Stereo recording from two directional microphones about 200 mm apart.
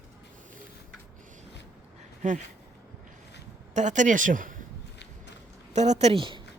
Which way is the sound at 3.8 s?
40° right (ahead or behind).